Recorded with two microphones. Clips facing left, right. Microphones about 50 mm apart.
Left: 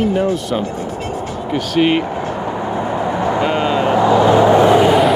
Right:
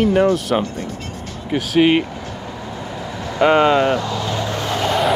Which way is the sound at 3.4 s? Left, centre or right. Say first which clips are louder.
Right 8 dB; right.